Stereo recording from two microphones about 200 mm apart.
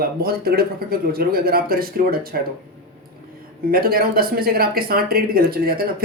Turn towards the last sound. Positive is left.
turn(degrees=-50)  # may be behind; listen again after turning